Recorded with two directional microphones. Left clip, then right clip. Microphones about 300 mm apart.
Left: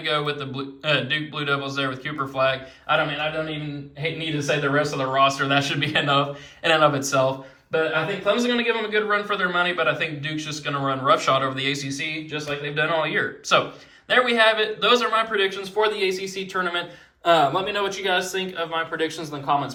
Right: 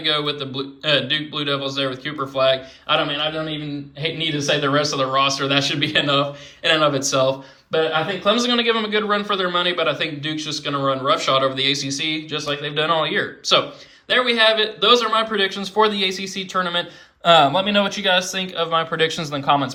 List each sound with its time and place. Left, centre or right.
0.0 s a man's voice: centre
4.0 s a man's voice: centre
17.2 s speech: right